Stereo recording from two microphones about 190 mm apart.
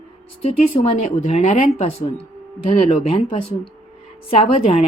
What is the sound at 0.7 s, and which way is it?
Speech, 30° left (ahead or behind).